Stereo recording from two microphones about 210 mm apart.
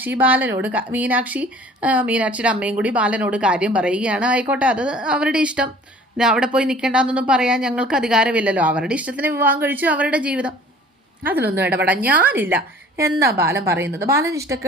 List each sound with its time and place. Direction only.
0.2 s speech: 5° right (ahead or behind)
11.9 s speech: 5° right (ahead or behind)
13.1 s a woman's voice: 50° right (ahead or behind)
13.4 s speech: 10° right (ahead or behind)